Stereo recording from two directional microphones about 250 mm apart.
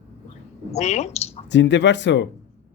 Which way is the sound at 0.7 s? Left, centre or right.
Left.